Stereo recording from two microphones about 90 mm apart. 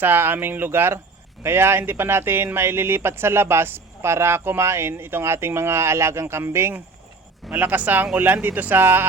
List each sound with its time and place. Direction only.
0.0 s speech: 25° right (ahead or behind)